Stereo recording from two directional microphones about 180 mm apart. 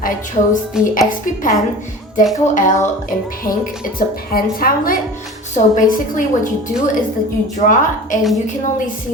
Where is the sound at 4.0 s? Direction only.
55° left (ahead or behind).